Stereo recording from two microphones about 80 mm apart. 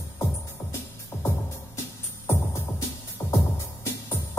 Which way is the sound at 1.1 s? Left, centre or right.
Left.